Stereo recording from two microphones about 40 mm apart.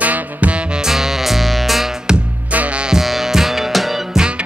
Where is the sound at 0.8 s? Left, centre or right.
Centre.